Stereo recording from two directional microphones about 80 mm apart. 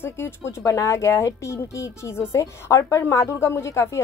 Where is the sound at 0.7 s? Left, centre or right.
Left.